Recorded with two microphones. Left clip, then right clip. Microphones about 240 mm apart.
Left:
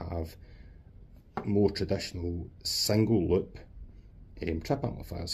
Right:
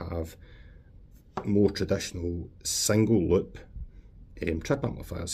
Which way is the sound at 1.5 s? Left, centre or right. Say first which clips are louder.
Right 3 dB; right.